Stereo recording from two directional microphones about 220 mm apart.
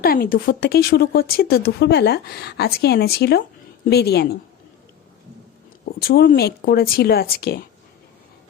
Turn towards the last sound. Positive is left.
turn(degrees=45)  # may be behind; listen again after turning